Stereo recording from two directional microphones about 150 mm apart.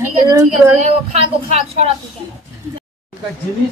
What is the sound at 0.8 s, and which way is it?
Speech, 50° right (ahead or behind).